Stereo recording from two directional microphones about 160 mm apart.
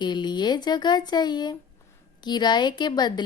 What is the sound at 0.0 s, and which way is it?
Speech, 30° left (ahead or behind).